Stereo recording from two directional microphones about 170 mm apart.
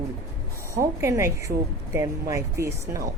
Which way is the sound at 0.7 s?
15° right (ahead or behind).